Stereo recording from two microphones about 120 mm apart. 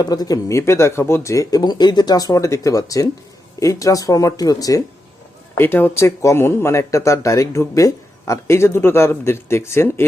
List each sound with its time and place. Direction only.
0.0 s speech: 35° left (ahead or behind)
5.5 s speech: 15° left (ahead or behind)